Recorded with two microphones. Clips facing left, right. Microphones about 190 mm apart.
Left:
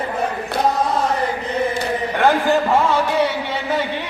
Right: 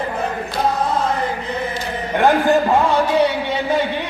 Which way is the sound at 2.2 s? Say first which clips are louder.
Right 2 dB; 15° right (ahead or behind).